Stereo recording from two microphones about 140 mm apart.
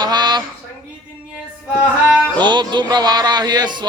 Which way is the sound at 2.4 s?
30° right (ahead or behind).